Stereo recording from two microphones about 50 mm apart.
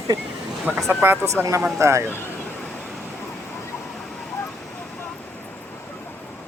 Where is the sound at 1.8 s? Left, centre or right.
Right.